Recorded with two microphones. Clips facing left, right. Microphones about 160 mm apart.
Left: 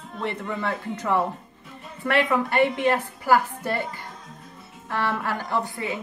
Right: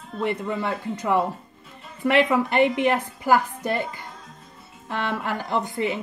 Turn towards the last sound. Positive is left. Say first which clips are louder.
# right 3 dB
turn(degrees=-20)  # may be behind; listen again after turning